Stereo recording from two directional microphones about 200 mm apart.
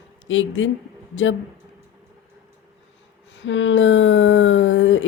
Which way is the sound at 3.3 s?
65° left (ahead or behind).